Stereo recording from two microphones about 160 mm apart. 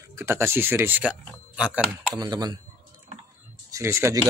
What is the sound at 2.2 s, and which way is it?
Speech, 25° right (ahead or behind).